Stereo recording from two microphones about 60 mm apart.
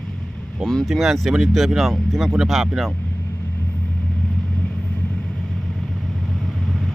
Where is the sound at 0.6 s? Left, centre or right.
Centre.